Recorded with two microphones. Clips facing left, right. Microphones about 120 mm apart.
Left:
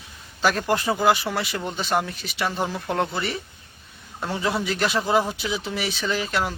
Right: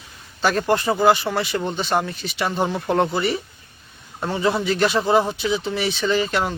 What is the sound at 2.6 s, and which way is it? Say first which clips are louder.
Speech: right 5 dB; 25° right (ahead or behind).